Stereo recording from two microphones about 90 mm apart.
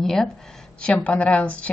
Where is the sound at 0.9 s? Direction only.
15° left (ahead or behind).